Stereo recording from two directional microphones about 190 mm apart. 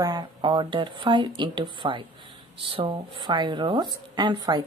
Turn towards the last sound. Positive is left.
turn(degrees=-25)  # may be behind; listen again after turning